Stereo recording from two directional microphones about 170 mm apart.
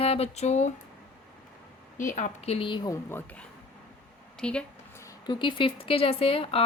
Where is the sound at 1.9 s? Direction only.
50° left (ahead or behind); by 2.9 s 25° left (ahead or behind).